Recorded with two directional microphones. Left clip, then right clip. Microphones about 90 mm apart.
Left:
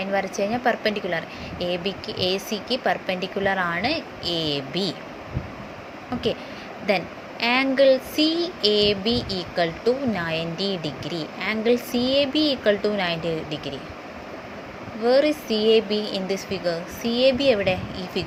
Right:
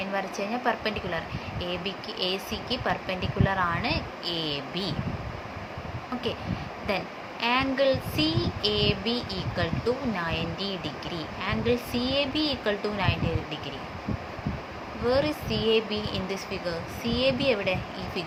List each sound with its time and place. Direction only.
0.0 s speech: 50° left (ahead or behind)
6.8 s speech: 55° left (ahead or behind)
15.0 s speech: 45° left (ahead or behind)